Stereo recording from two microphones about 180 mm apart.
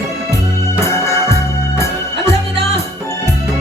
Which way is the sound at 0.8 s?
15° left (ahead or behind).